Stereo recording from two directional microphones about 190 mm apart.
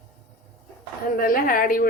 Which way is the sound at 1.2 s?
50° left (ahead or behind).